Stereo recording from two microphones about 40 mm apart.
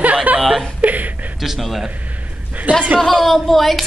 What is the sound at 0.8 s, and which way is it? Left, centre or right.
Speech, right.